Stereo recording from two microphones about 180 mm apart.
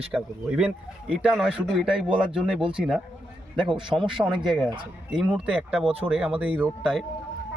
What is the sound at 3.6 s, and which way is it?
Speech, 25° right (ahead or behind).